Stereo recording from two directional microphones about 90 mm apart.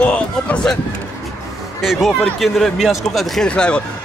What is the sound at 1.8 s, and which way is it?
A man's voice, centre (ahead or behind).